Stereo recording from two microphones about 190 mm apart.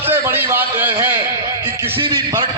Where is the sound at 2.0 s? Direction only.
25° right (ahead or behind).